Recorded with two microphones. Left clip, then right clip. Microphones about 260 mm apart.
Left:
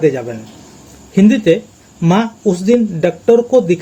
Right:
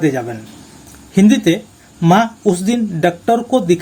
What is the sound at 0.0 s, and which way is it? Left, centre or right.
Speech, right.